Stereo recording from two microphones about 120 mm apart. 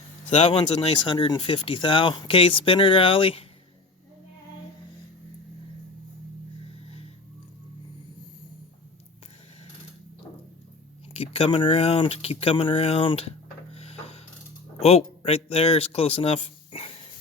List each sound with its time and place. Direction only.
0.3 s speech: 65° left (ahead or behind)
11.1 s speech: 55° left (ahead or behind)
13.7 s rub: 55° left (ahead or behind)
14.8 s speech: 60° left (ahead or behind)